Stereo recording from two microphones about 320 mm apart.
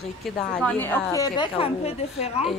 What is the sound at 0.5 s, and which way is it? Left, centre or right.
A woman's voice, centre.